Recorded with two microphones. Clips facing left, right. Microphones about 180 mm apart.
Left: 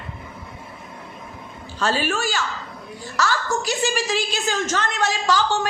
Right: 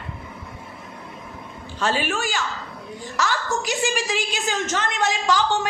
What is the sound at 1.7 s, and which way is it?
A woman's voice, 15° right (ahead or behind).